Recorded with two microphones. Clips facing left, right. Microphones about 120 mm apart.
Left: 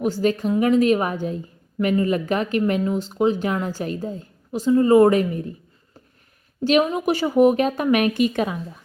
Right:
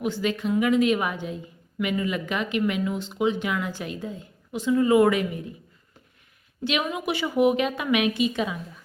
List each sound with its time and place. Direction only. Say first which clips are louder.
0.0 s speech: left 5 dB; 40° left (ahead or behind)
6.7 s a woman's voice: left 8 dB; 40° left (ahead or behind)